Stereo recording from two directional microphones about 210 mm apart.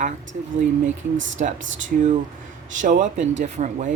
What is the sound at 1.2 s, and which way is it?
Speech, 65° right (ahead or behind).